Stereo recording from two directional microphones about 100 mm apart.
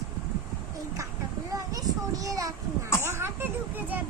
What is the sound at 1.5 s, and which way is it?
Children playing, 40° right (ahead or behind).